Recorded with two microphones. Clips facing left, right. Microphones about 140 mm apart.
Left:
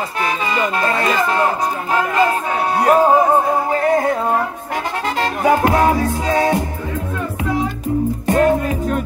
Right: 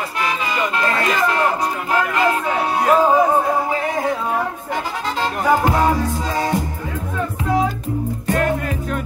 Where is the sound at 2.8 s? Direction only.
50° left (ahead or behind).